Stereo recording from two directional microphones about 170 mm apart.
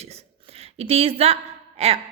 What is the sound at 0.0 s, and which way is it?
A woman's voice, 40° right (ahead or behind).